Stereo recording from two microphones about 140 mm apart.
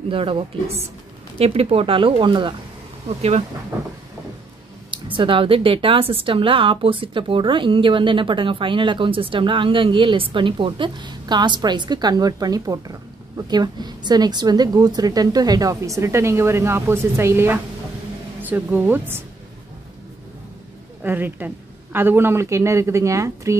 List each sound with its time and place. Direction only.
0.1 s speech: 40° right (ahead or behind)
3.2 s speech: 45° right (ahead or behind)
4.9 s a woman's voice: 35° right (ahead or behind); by 19.2 s 15° right (ahead or behind)
21.0 s a woman's voice: 15° right (ahead or behind)